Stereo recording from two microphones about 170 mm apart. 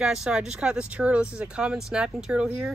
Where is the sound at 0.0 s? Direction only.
5° right (ahead or behind).